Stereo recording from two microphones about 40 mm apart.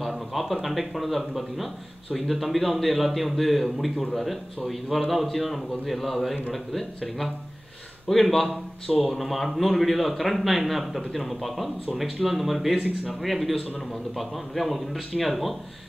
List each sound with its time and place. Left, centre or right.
0.0 s a man's voice: centre
12.7 s speech: right
13.2 s a man's voice: centre